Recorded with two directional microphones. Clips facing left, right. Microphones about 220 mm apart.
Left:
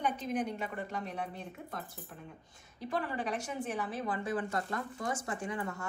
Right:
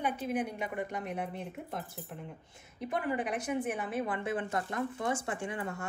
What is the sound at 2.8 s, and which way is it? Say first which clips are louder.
A woman's voice: right 2 dB; 20° right (ahead or behind).